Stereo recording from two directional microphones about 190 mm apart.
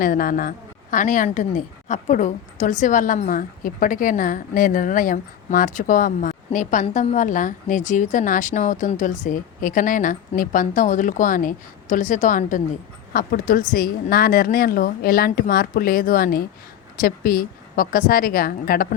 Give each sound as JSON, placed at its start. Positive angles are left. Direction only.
{"t": 0.0, "sound": "a woman's voice", "side_deg": 50}